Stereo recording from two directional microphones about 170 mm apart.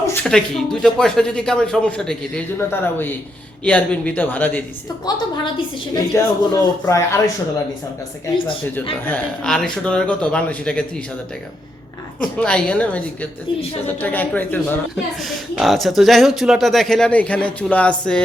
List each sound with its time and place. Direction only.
0.1 s a woman's voice: 5° left (ahead or behind)
5.5 s a woman's voice: 20° left (ahead or behind)
9.0 s speech: 5° left (ahead or behind)
12.2 s a woman's voice: 5° left (ahead or behind)
15.5 s speech: centre (ahead or behind)